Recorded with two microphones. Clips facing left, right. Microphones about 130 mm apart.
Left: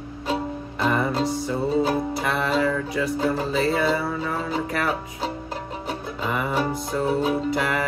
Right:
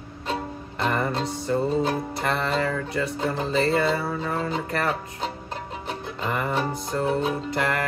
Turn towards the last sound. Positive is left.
turn(degrees=5)  # may be behind; listen again after turning